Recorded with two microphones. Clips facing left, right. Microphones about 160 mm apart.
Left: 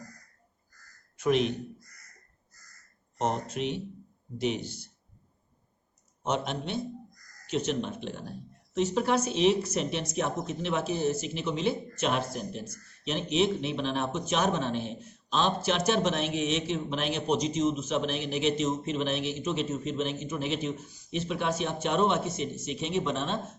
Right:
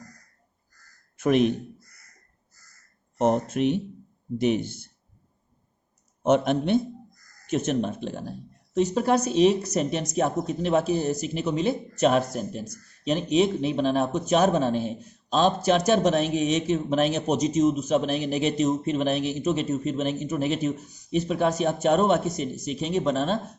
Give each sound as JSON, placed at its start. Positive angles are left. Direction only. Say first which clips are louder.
{"t": 1.1, "sound": "a man's voice", "louder": "right 5 dB", "side_deg": -50}
{"t": 3.2, "sound": "speech", "louder": "right 8 dB", "side_deg": -55}
{"t": 6.2, "sound": "a man's voice", "louder": "right 10 dB", "side_deg": -55}